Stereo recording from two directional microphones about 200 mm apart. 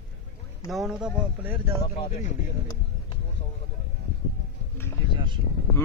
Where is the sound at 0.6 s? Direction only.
Centre (ahead or behind).